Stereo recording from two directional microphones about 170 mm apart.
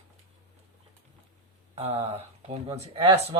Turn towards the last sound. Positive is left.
turn(degrees=-35)  # may be behind; listen again after turning